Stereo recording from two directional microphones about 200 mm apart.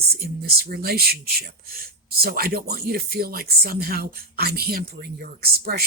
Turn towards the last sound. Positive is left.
turn(degrees=-50)  # may be behind; listen again after turning